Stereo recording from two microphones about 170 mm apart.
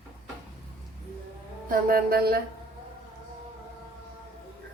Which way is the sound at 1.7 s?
60° right (ahead or behind).